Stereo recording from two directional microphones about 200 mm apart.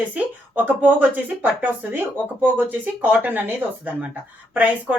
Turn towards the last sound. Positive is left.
turn(degrees=-10)  # may be behind; listen again after turning